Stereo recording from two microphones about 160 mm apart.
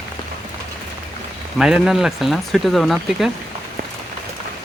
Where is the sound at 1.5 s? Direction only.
5° right (ahead or behind).